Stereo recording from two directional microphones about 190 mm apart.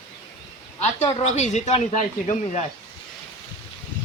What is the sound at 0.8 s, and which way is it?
Speech, 35° left (ahead or behind).